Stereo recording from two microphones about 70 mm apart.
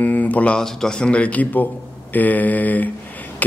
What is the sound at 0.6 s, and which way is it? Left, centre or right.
A man's voice, centre.